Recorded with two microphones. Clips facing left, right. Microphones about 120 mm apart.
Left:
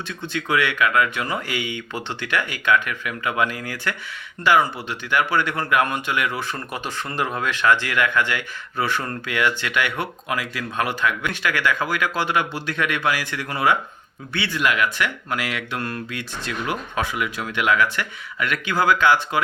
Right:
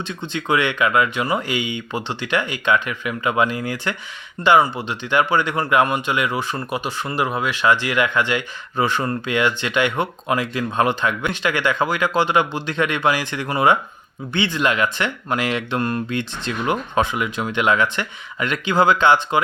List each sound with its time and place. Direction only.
0.1 s speech: 20° right (ahead or behind)